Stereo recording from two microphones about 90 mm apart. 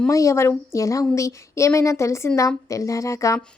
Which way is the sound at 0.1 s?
35° left (ahead or behind).